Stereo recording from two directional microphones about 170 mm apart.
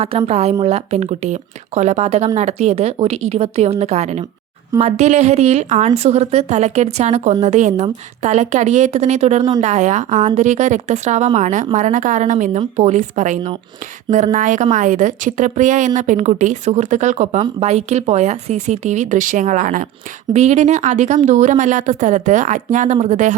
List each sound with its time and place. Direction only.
0.0 s a woman's voice: 35° right (ahead or behind)
20.3 s a woman's voice: 40° right (ahead or behind)